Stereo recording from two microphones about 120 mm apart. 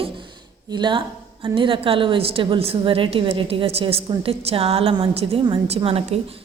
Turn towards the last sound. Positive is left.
turn(degrees=-55)  # may be behind; listen again after turning